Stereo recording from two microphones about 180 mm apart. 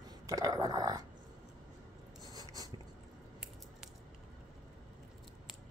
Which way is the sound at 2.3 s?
20° right (ahead or behind).